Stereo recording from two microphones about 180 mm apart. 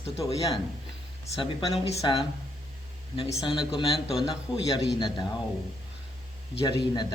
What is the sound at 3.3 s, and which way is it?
Speech, 20° left (ahead or behind).